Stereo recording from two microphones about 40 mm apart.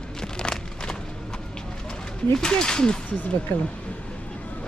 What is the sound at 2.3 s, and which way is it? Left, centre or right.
Speech, centre.